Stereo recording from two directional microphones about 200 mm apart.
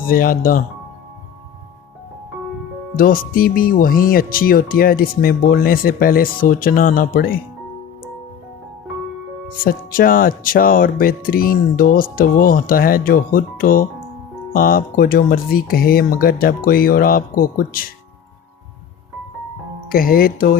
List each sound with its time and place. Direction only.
0.0 s speech: 45° left (ahead or behind)
2.9 s speech: 45° left (ahead or behind)
9.6 s speech: 45° left (ahead or behind)
19.9 s speech: 45° left (ahead or behind)